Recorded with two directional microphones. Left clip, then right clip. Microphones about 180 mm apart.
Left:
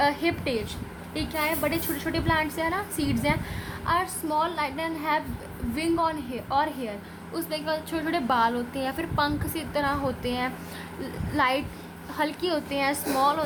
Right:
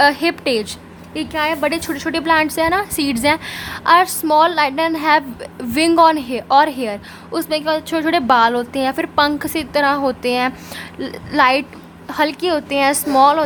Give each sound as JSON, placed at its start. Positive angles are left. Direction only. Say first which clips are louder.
{"t": 0.0, "sound": "a woman's voice", "louder": "right 10 dB", "side_deg": -40}